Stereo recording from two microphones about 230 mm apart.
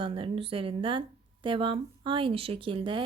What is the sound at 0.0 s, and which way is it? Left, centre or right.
Speech, right.